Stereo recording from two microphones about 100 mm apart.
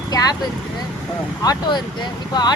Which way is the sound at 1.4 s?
40° left (ahead or behind).